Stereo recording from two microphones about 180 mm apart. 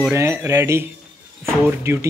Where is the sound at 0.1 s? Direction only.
15° right (ahead or behind).